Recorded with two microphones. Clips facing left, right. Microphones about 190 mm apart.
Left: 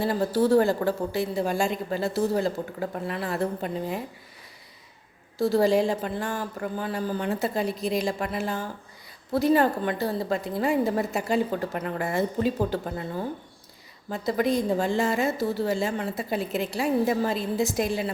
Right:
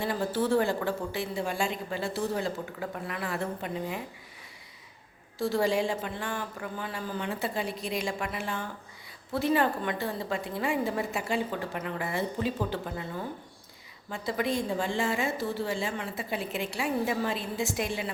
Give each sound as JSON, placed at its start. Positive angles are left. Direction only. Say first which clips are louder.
{"t": 0.0, "sound": "a woman's voice", "louder": "left 5 dB", "side_deg": 40}
{"t": 5.4, "sound": "a woman's voice", "louder": "left 6 dB", "side_deg": 35}